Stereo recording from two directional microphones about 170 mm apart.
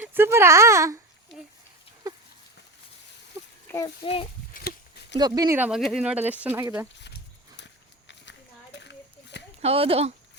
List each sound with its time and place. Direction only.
0.0 s speech: 10° right (ahead or behind)
1.3 s a sound: 90° left
3.7 s a child's voice: 15° left (ahead or behind)
4.0 s a child's voice: 35° left (ahead or behind)
5.1 s speech: 25° right (ahead or behind)
5.5 s speech: 5° right (ahead or behind)
7.5 s a sound: 90° left
9.6 s speech: 35° right (ahead or behind)